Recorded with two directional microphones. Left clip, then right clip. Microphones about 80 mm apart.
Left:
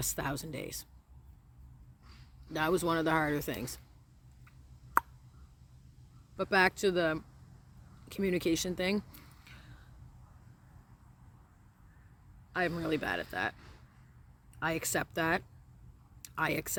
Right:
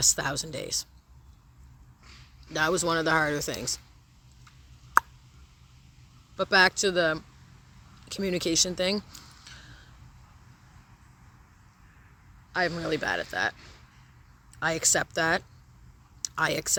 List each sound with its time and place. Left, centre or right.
0.0 s speech: left
2.5 s speech: left
5.0 s a sound: left
6.3 s speech: left
12.5 s a man's voice: left
14.6 s speech: left